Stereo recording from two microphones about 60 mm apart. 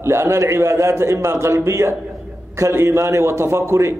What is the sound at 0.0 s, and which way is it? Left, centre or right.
A man's voice, right.